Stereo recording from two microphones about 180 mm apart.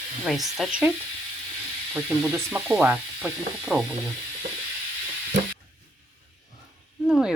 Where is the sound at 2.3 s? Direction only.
15° right (ahead or behind).